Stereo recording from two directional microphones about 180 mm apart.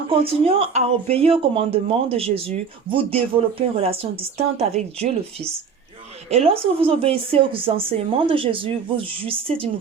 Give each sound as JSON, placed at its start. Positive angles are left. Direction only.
{"t": 0.1, "sound": "speech", "side_deg": -30}